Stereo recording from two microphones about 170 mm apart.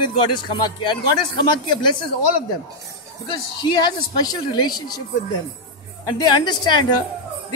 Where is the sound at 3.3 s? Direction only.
25° left (ahead or behind).